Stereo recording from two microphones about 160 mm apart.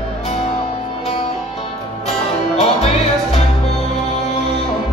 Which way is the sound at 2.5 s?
40° left (ahead or behind).